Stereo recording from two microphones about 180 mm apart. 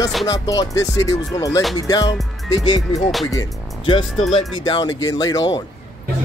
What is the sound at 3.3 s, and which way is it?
Speech, 25° left (ahead or behind).